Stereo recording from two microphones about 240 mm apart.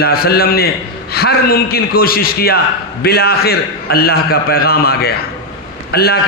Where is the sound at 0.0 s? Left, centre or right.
Left.